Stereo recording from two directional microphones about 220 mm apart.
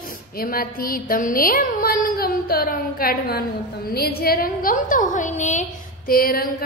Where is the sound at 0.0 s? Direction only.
40° left (ahead or behind).